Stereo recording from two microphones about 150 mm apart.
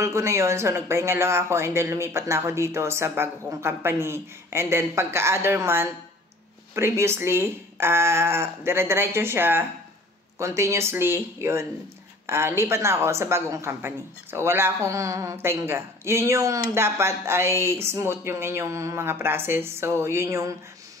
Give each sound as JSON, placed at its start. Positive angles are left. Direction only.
{"t": 0.0, "sound": "speech", "side_deg": -20}